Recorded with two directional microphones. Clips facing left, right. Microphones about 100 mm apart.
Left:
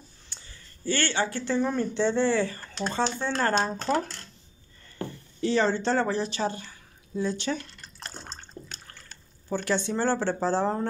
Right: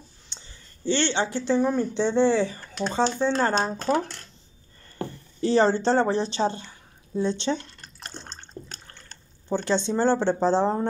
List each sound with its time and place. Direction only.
0.3 s a sound: 25° right (ahead or behind)
1.6 s speech: 5° right (ahead or behind)
2.0 s speech: 15° right (ahead or behind)
3.6 s speech: 5° right (ahead or behind)
5.4 s a woman's voice: 35° right (ahead or behind)
8.7 s water: 40° right (ahead or behind)
9.5 s speech: 25° right (ahead or behind)